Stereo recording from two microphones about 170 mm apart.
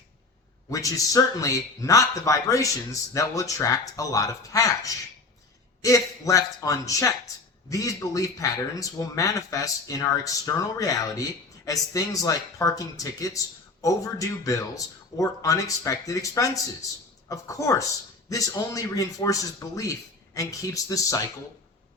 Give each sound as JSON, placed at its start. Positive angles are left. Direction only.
{"t": 0.7, "sound": "speech", "side_deg": 20}